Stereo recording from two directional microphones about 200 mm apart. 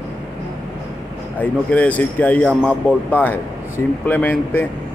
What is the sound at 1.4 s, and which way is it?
Speech, 5° left (ahead or behind).